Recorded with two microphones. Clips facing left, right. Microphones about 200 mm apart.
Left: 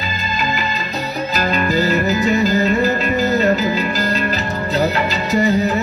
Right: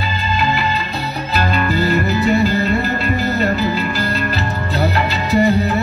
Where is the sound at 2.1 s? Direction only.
35° right (ahead or behind).